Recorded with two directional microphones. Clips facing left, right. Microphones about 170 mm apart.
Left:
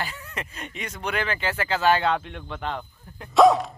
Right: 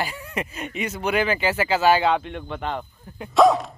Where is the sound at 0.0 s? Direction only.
15° right (ahead or behind).